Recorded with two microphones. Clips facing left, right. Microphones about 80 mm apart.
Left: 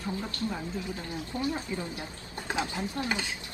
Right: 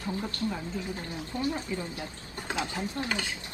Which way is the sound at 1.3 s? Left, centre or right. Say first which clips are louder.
Right 1 dB; left.